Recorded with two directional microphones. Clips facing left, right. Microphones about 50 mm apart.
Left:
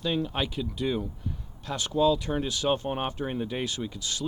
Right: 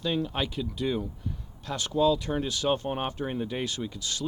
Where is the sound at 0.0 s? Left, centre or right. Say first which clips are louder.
Even; centre.